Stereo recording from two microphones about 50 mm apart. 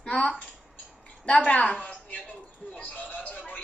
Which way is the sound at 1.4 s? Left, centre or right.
Left.